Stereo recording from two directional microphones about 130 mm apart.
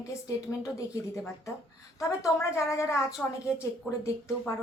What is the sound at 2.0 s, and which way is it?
A woman's voice, 25° left (ahead or behind).